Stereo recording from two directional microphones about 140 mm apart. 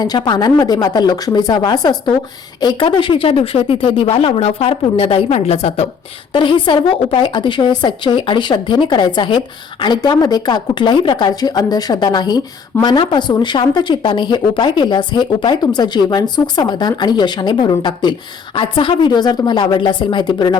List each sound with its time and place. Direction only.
0.0 s a woman's voice: 30° left (ahead or behind); by 5.9 s 45° left (ahead or behind)
6.3 s a woman's voice: 35° left (ahead or behind)